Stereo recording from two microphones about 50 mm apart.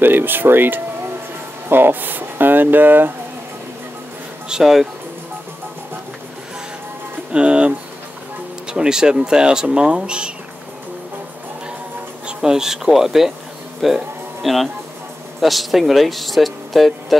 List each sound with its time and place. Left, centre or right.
0.0 s speech: right
4.5 s speech: centre
7.3 s speech: right
12.3 s speech: centre
13.7 s music: centre
15.4 s speech: centre